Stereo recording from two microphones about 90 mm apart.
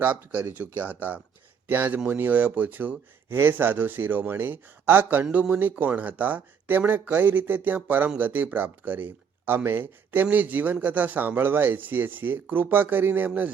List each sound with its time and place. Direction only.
0.0 s speech: 20° right (ahead or behind)